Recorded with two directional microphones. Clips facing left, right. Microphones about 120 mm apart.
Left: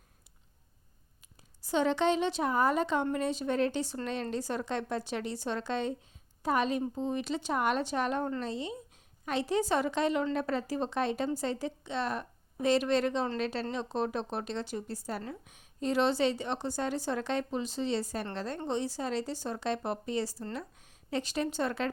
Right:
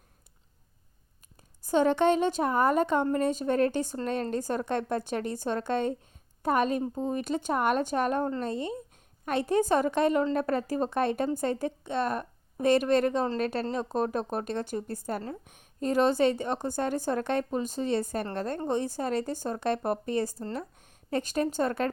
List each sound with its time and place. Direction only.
1.6 s a woman's voice: 45° right (ahead or behind)